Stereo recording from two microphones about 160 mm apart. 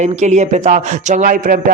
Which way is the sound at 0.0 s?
50° right (ahead or behind).